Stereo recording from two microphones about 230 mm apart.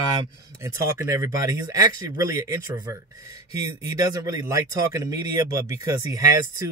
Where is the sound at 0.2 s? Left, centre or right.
Centre.